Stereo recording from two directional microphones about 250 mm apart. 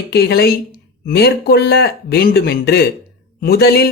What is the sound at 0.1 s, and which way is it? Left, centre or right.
Speech, left.